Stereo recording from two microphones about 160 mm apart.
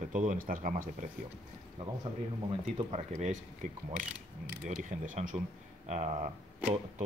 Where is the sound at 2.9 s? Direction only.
45° right (ahead or behind).